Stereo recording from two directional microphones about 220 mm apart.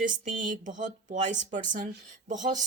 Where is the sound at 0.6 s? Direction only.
35° right (ahead or behind).